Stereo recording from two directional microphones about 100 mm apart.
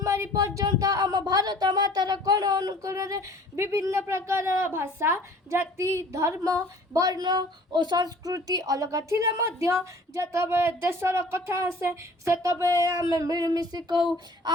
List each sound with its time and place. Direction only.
0.0 s speech: 30° right (ahead or behind)